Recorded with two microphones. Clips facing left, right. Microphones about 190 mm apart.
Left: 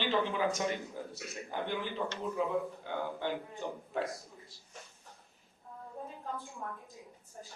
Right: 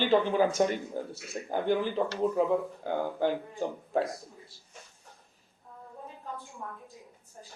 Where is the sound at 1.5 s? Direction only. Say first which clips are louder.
Right 9 dB; 45° right (ahead or behind).